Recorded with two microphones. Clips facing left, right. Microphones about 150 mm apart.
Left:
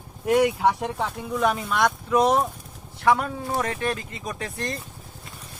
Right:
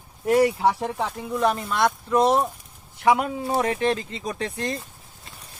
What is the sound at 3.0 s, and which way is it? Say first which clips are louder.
Speech: right 1 dB; 20° right (ahead or behind).